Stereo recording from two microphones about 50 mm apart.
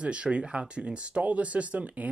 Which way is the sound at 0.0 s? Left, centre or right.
Right.